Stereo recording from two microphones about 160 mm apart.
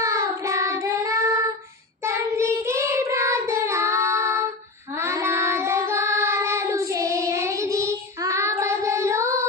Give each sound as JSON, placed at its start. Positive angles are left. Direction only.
{"t": 0.0, "sound": "child singing", "side_deg": -20}